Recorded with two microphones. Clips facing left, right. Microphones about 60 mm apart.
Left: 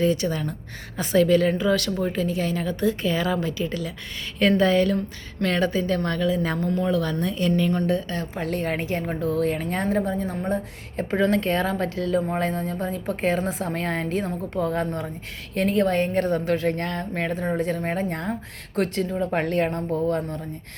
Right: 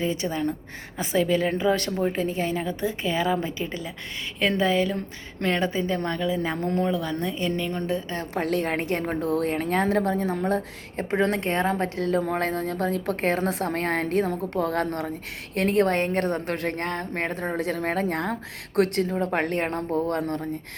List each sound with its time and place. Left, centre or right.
0.0 s a woman's voice: centre
0.9 s a sound: centre
1.5 s a woman's voice: right
4.4 s a sound: centre
5.4 s a woman's voice: centre
6.6 s speech: right
6.8 s a woman's voice: centre
8.4 s a woman's voice: right
11.2 s a woman's voice: right
17.6 s a woman's voice: right